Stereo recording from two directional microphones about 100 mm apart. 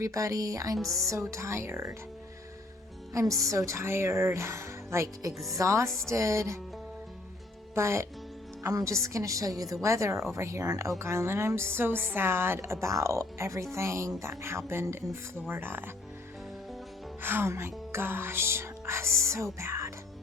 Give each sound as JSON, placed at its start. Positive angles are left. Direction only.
{"t": 0.0, "sound": "a woman's voice", "side_deg": -35}
{"t": 0.8, "sound": "speech", "side_deg": 0}
{"t": 1.0, "sound": "a woman's voice", "side_deg": -30}
{"t": 3.1, "sound": "a woman's voice", "side_deg": -30}
{"t": 7.8, "sound": "a woman's voice", "side_deg": -30}
{"t": 17.2, "sound": "a woman's voice", "side_deg": -25}